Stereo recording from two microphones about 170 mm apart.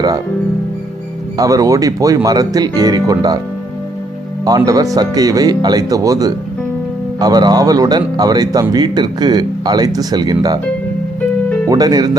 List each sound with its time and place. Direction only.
1.4 s speech: 20° right (ahead or behind)
4.4 s speech: 20° right (ahead or behind)
11.7 s speech: 20° right (ahead or behind)